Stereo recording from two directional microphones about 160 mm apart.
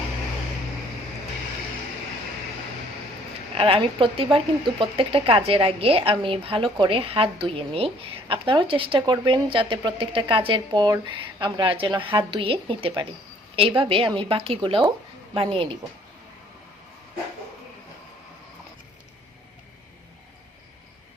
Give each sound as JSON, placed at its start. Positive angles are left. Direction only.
{"t": 3.5, "sound": "speech", "side_deg": -35}